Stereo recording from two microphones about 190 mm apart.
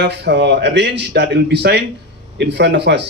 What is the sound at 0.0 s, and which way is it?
A man's voice, 65° right (ahead or behind).